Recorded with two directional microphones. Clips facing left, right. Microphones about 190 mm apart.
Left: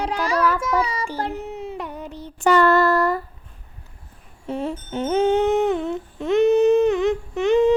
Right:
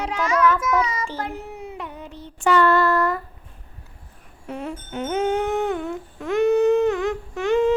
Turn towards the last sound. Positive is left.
turn(degrees=20)  # may be behind; listen again after turning